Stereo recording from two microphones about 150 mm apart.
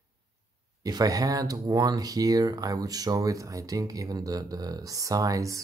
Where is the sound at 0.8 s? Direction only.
25° right (ahead or behind).